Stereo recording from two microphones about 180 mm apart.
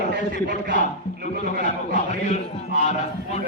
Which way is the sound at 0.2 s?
45° left (ahead or behind).